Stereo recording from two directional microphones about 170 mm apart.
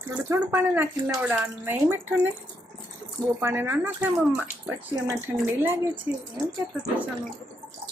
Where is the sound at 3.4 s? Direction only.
15° right (ahead or behind).